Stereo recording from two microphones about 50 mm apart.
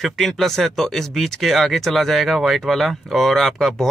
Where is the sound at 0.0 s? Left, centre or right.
Centre.